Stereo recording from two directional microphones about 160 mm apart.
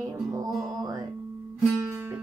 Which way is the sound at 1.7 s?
15° right (ahead or behind).